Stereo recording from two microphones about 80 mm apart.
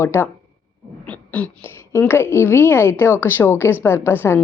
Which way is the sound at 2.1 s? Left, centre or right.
Left.